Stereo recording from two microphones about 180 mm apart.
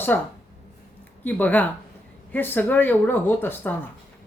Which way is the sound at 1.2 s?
10° left (ahead or behind).